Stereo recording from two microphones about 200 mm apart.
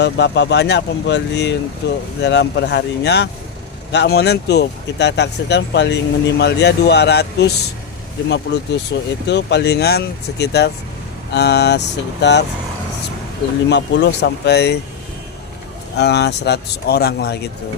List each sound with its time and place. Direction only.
0.0 s speech: 60° left (ahead or behind)
13.7 s speech: 60° left (ahead or behind)
16.0 s speech: 60° left (ahead or behind)